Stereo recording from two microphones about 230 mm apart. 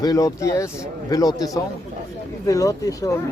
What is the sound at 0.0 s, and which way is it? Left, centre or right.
Speech, centre.